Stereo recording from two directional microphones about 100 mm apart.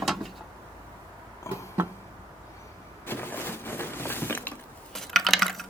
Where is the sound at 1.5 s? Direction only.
30° left (ahead or behind).